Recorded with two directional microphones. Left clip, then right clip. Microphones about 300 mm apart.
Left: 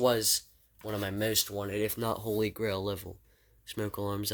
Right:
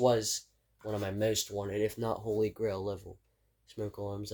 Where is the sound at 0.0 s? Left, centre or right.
Left.